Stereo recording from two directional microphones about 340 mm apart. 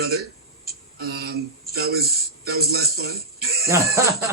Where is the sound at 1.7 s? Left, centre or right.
Right.